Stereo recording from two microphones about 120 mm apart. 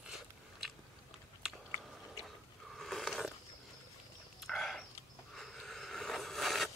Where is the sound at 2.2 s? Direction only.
Centre (ahead or behind).